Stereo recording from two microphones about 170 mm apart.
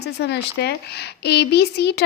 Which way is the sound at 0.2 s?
80° left.